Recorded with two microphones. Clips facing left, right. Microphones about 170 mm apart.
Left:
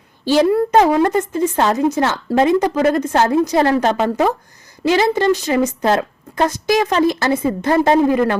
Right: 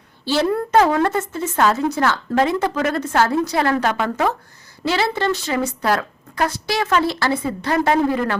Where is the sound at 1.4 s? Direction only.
30° left (ahead or behind).